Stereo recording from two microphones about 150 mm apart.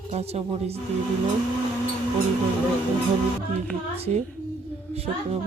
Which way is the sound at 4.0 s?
45° right (ahead or behind).